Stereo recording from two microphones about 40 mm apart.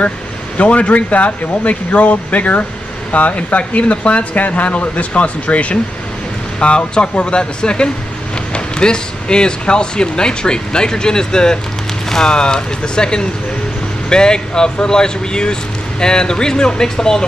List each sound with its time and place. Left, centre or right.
0.6 s speech: left; by 17.2 s centre